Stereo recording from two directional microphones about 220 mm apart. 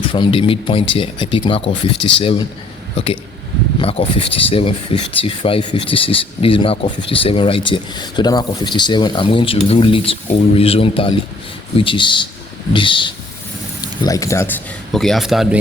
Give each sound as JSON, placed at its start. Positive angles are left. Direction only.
{"t": 0.0, "sound": "speech", "side_deg": 20}